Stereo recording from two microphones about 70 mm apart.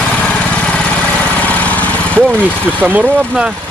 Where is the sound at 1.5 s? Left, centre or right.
Left.